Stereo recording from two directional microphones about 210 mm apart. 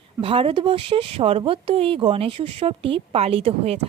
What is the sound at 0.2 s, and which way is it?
Speech, 25° right (ahead or behind).